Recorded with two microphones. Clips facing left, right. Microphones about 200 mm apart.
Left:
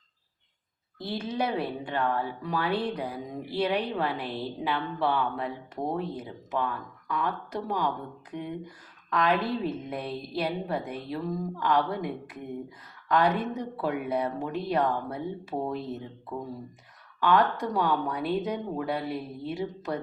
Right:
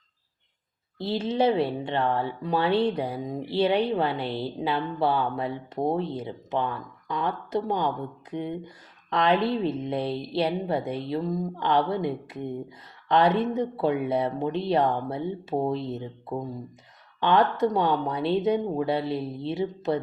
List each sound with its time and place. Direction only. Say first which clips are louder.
0.9 s speech: right 6 dB; 25° right (ahead or behind)